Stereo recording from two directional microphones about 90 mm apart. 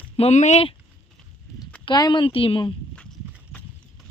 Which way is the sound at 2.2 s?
85° left.